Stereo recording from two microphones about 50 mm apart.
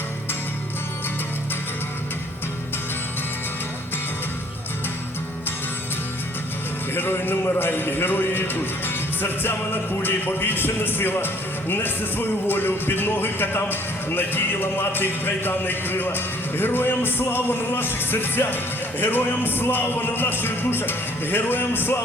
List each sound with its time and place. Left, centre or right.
6.9 s speech: left